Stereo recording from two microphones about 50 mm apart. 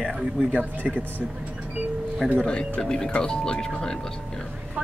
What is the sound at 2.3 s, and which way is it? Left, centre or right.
Speech, centre.